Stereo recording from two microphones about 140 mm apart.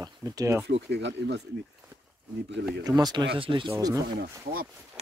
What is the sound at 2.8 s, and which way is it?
Speech, 30° right (ahead or behind).